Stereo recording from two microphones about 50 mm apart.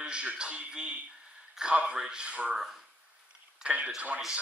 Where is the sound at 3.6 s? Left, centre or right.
Right.